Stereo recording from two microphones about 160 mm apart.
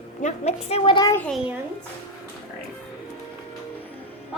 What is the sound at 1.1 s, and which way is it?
Speech, 5° left (ahead or behind).